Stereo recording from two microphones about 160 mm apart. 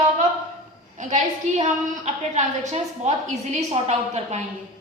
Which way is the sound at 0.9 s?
45° right (ahead or behind).